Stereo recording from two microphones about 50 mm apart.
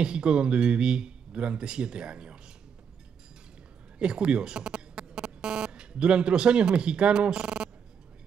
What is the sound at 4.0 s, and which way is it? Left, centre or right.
Speech, centre.